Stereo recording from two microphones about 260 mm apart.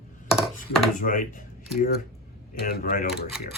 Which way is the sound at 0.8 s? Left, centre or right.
Left.